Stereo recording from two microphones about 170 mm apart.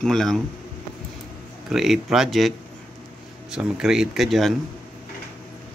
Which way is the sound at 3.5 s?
5° right (ahead or behind).